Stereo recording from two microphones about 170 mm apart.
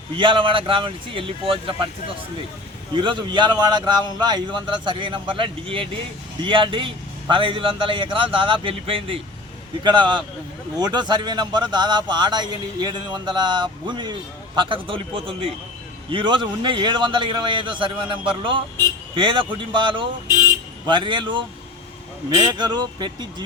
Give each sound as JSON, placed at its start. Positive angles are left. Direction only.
{"t": 0.2, "sound": "a man's voice", "side_deg": -30}
{"t": 2.9, "sound": "a man's voice", "side_deg": -30}